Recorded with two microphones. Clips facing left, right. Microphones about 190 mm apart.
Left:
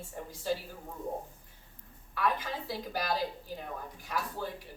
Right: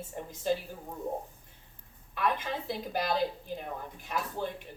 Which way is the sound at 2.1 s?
20° right (ahead or behind).